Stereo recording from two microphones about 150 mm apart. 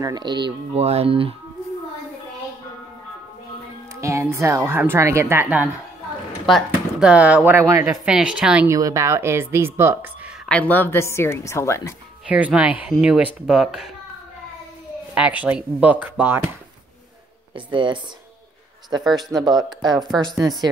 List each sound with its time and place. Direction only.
0.0 s speech: 30° right (ahead or behind)
0.7 s speech: 45° right (ahead or behind)
4.0 s a woman's voice: 20° right (ahead or behind)
7.8 s a woman's voice: 10° right (ahead or behind)
8.6 s a woman's voice: 20° right (ahead or behind)
10.4 s speech: 10° left (ahead or behind)
12.3 s a woman's voice: 10° right (ahead or behind)
15.1 s a woman's voice: 10° right (ahead or behind)
17.6 s speech: 35° right (ahead or behind)
19.0 s speech: centre (ahead or behind)
19.3 s speech: 30° right (ahead or behind)